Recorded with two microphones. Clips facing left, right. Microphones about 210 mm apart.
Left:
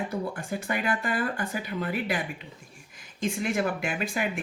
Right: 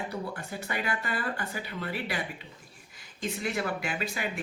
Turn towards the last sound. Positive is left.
turn(degrees=50)  # may be behind; listen again after turning